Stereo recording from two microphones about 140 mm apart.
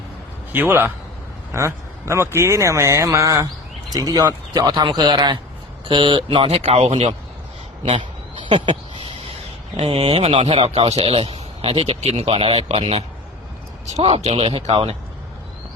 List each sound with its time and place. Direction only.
0.5 s a man's voice: 15° right (ahead or behind); by 7.2 s 45° right (ahead or behind)
7.9 s a sound: 35° right (ahead or behind)
9.7 s a man's voice: 45° right (ahead or behind)